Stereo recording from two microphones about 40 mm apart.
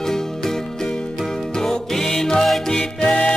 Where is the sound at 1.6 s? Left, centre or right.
Centre.